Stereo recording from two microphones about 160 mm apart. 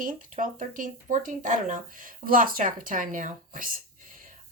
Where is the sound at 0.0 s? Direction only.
55° right (ahead or behind).